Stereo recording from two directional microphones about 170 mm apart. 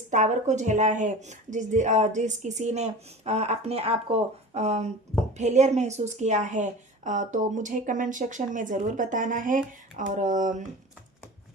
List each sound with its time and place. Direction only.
0.1 s a woman's voice: 45° right (ahead or behind)